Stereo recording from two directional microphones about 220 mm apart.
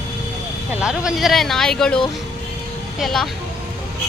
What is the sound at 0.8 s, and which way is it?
Speech, 5° right (ahead or behind).